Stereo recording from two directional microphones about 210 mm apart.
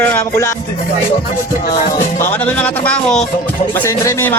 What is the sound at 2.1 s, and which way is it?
Speech, 10° left (ahead or behind).